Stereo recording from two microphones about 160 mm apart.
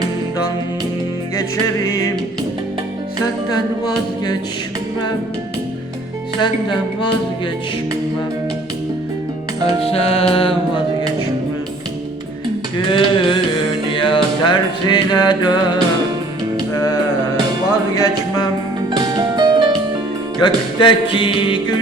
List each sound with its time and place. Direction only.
6.4 s speech: 30° left (ahead or behind)
9.8 s speech: 40° left (ahead or behind)
12.9 s speech: 30° left (ahead or behind)
13.9 s music: 30° left (ahead or behind)
18.9 s music: 25° right (ahead or behind)
20.4 s speech: 30° left (ahead or behind)